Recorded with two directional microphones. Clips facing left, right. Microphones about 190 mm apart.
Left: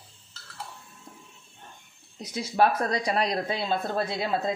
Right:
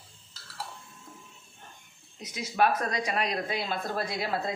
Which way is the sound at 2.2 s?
30° left (ahead or behind).